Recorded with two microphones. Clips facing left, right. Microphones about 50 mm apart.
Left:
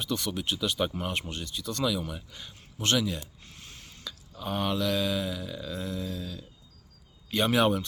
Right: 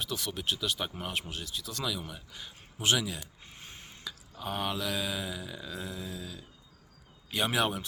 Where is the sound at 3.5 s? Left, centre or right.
Centre.